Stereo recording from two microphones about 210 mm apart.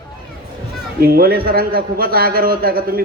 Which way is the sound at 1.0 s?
45° right (ahead or behind).